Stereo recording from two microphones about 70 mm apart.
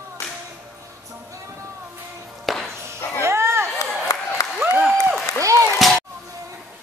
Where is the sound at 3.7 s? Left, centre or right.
Left.